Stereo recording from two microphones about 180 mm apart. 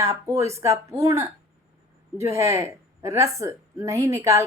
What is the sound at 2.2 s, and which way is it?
A woman's voice, 15° right (ahead or behind).